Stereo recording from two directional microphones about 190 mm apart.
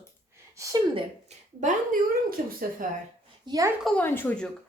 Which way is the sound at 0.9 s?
40° right (ahead or behind).